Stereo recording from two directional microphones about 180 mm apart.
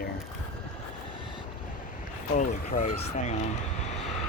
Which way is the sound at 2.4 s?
45° left (ahead or behind).